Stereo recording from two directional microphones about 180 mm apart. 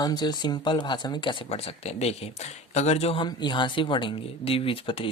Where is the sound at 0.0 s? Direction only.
20° left (ahead or behind).